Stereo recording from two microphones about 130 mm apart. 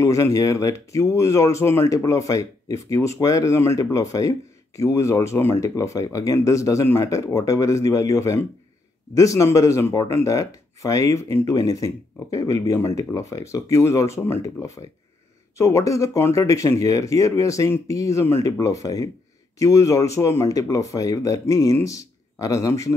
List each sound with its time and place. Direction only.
0.0 s speech: 25° left (ahead or behind)